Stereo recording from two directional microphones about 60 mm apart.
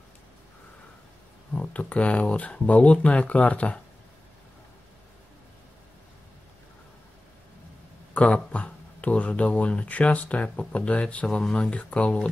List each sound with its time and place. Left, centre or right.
1.5 s speech: left
8.1 s speech: left